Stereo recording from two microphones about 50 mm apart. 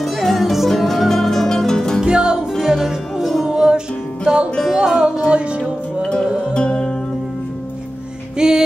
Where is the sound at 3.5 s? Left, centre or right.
Centre.